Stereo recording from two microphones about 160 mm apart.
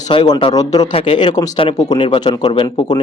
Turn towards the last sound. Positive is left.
turn(degrees=30)  # may be behind; listen again after turning